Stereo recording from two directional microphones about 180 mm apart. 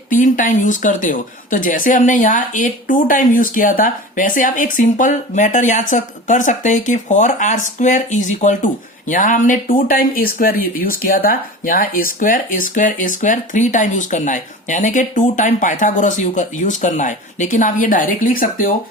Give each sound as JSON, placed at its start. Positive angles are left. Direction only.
{"t": 0.1, "sound": "speech", "side_deg": 45}